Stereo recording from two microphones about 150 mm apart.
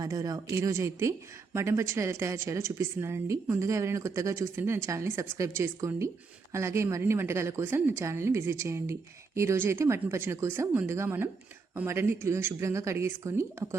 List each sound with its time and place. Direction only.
0.0 s a woman's voice: 25° right (ahead or behind)